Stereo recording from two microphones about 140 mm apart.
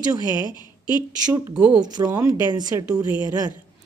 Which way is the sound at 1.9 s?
30° right (ahead or behind).